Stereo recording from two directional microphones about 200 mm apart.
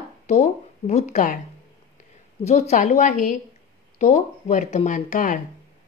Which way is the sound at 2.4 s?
35° left (ahead or behind).